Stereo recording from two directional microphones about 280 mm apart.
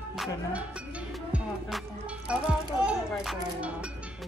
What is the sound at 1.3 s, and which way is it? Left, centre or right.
Music, centre.